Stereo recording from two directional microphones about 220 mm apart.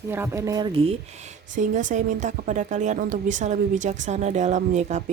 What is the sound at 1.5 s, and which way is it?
Speech, 35° right (ahead or behind).